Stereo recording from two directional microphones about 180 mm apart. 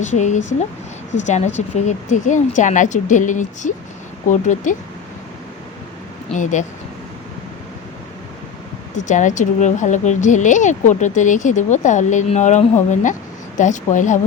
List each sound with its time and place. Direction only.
0.0 s speech: 40° left (ahead or behind)
6.3 s speech: 45° left (ahead or behind)
9.0 s speech: 45° left (ahead or behind)